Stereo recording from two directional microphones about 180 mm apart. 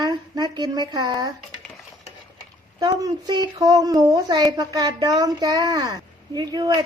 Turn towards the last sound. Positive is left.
turn(degrees=-25)  # may be behind; listen again after turning